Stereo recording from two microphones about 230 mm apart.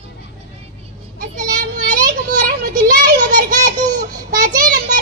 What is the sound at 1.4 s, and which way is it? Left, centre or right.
Child singing, right.